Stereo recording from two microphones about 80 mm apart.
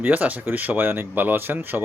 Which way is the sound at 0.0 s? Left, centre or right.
Centre.